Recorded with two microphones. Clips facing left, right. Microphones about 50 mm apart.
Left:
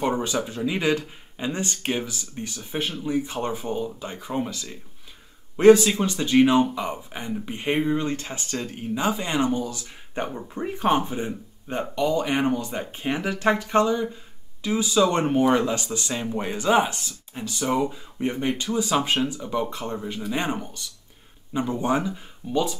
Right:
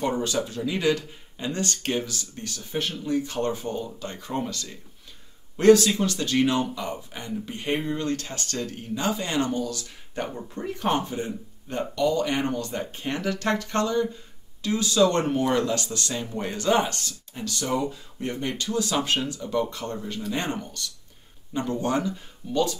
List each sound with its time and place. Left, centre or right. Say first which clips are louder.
0.0 s speech: left 1 dB; centre